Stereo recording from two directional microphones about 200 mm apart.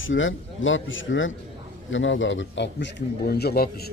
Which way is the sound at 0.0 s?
75° left (ahead or behind).